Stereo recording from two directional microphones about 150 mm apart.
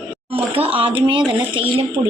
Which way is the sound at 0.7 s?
35° right (ahead or behind).